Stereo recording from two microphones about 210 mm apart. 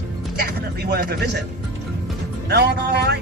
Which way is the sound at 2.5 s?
50° right (ahead or behind).